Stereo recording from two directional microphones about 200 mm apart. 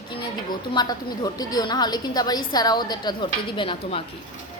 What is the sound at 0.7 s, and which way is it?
A woman's voice, 20° left (ahead or behind).